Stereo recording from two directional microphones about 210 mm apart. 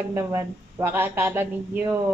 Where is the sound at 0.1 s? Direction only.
10° right (ahead or behind).